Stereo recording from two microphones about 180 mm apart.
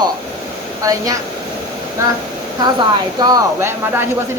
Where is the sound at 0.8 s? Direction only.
20° right (ahead or behind).